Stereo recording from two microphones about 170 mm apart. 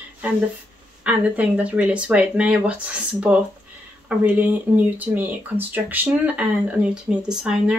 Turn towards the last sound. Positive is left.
turn(degrees=-5)  # may be behind; listen again after turning